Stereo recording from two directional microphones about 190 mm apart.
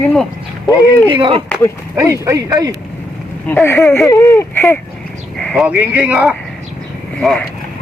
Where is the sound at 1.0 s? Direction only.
25° right (ahead or behind).